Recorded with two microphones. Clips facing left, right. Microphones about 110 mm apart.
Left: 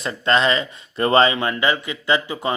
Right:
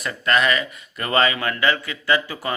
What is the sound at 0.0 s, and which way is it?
Speech, 25° left (ahead or behind).